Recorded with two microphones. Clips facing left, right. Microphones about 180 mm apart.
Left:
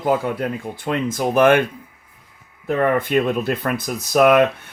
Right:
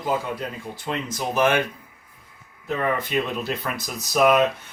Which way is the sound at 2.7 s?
50° left (ahead or behind).